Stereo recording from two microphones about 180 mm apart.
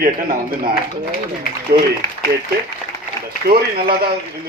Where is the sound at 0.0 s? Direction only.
50° right (ahead or behind).